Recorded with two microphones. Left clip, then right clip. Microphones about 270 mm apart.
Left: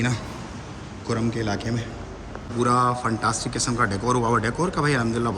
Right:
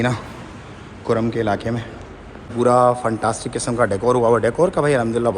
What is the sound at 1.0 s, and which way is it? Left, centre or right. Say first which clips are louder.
A man's voice: right 7 dB; centre.